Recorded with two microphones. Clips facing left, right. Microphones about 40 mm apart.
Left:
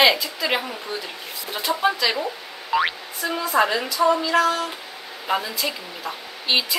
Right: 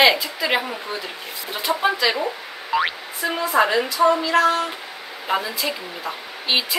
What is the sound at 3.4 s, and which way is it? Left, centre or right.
A woman's voice, centre.